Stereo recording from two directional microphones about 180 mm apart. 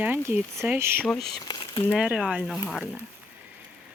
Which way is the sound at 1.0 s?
Centre (ahead or behind).